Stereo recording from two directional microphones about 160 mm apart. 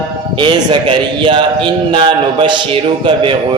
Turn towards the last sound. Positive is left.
turn(degrees=-30)  # may be behind; listen again after turning